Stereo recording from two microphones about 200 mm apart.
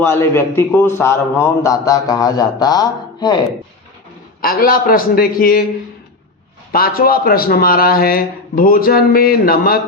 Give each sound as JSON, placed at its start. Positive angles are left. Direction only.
{"t": 0.0, "sound": "a man's voice", "side_deg": 10}
{"t": 4.4, "sound": "a man's voice", "side_deg": 45}
{"t": 6.7, "sound": "a man's voice", "side_deg": 50}